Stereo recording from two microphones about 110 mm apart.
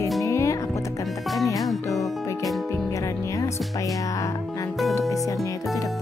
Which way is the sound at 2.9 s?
30° left (ahead or behind).